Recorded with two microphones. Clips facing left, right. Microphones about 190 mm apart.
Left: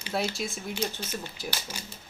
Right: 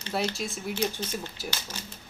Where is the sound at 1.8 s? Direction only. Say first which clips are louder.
Right 1 dB; 10° left (ahead or behind).